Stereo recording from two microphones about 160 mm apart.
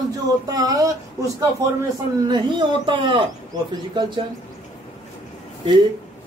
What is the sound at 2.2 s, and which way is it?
A man's voice, 30° right (ahead or behind).